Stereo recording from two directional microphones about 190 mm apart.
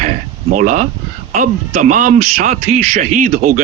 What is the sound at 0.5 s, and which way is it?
Speech, 45° right (ahead or behind).